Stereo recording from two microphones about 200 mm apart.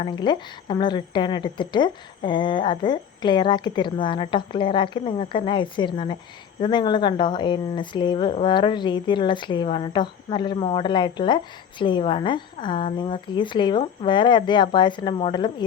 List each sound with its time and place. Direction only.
0.0 s speech: 25° left (ahead or behind)